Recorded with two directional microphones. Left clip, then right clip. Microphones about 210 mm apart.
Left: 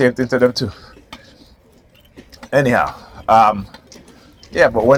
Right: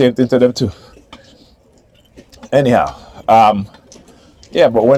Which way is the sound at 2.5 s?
55° right (ahead or behind).